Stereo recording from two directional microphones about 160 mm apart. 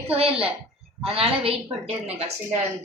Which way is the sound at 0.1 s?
35° right (ahead or behind).